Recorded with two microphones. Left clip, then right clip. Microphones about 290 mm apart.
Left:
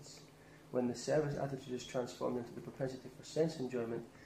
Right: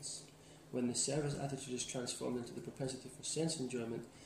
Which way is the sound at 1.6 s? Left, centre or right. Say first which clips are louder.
Left 3 dB; centre.